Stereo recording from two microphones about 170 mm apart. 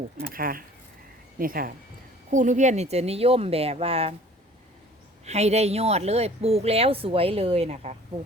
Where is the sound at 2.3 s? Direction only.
45° right (ahead or behind).